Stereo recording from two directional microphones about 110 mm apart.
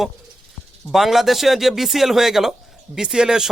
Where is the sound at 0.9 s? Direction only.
Centre (ahead or behind).